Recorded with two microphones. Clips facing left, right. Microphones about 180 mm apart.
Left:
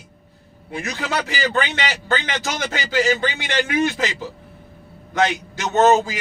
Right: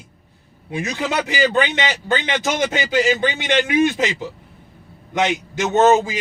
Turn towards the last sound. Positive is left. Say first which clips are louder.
# right 1 dB
turn(degrees=-20)  # may be behind; listen again after turning